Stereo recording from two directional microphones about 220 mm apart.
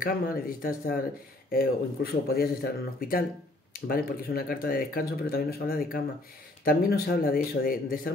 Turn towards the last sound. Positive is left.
turn(degrees=40)  # may be behind; listen again after turning